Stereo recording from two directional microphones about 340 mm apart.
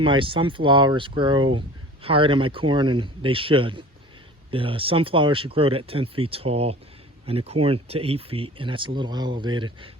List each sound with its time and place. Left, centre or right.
0.0 s speech: centre